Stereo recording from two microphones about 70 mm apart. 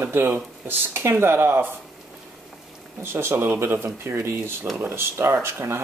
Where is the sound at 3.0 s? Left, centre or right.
Right.